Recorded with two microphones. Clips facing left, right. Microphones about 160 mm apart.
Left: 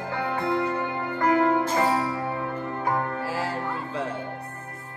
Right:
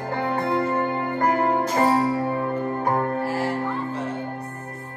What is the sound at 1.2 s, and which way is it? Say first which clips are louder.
Music: left 1 dB; 45° right (ahead or behind).